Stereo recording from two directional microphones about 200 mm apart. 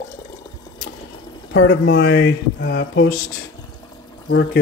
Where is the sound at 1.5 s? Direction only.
60° left (ahead or behind).